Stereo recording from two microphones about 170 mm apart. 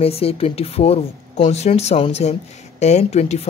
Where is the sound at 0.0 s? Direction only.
35° left (ahead or behind).